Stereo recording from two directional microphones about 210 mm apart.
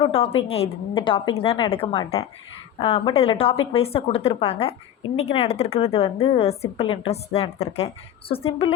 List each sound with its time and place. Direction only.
0.0 s a woman's voice: 25° left (ahead or behind)